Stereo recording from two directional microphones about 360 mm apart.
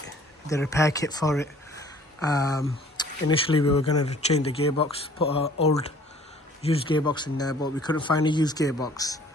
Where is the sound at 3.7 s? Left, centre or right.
Left.